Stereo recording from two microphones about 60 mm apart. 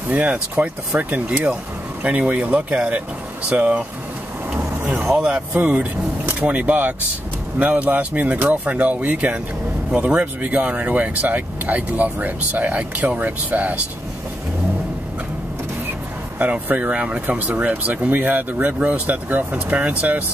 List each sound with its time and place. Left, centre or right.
0.1 s speech: right
5.1 s speech: centre
5.5 s speech: right
16.3 s speech: right